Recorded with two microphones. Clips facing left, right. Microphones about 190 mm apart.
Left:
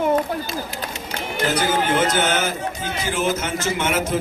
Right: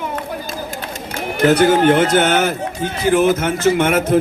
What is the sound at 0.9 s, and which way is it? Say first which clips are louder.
Speech: right 4 dB; 60° right (ahead or behind).